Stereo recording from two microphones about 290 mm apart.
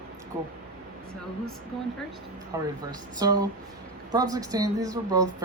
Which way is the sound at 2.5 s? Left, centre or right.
Centre.